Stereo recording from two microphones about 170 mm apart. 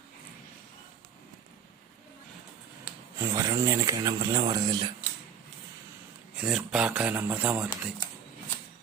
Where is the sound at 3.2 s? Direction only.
20° right (ahead or behind).